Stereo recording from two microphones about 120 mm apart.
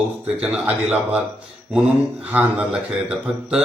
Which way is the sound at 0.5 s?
10° right (ahead or behind).